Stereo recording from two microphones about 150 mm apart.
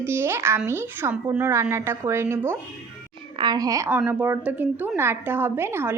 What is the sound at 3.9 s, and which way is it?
A woman's voice, 10° right (ahead or behind).